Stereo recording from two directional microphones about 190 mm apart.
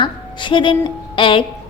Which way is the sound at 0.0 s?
25° left (ahead or behind).